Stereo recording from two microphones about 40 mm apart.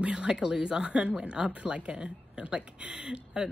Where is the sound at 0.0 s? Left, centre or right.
Right.